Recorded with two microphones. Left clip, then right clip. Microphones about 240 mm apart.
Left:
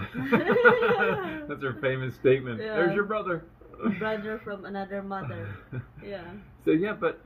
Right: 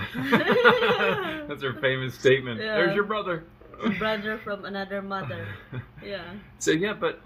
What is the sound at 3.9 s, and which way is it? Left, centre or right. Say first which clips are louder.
Speech: right 5 dB; right.